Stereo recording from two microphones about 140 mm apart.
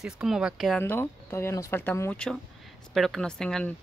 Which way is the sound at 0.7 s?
15° left (ahead or behind).